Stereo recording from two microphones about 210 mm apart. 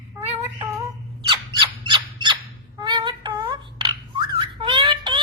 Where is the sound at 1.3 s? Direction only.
25° right (ahead or behind).